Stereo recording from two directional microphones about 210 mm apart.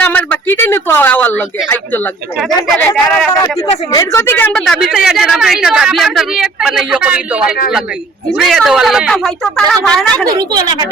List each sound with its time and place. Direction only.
0.0 s a woman's voice: 10° left (ahead or behind)
2.8 s a woman's voice: 5° left (ahead or behind)
10.3 s a woman's voice: 20° right (ahead or behind)